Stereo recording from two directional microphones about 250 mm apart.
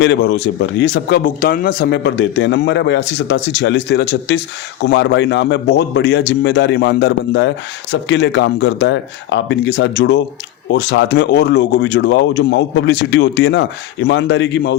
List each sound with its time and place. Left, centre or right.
0.0 s a man's voice: left